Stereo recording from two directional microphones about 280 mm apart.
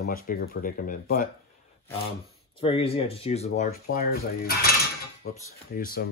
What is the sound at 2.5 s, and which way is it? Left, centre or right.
Speech, centre.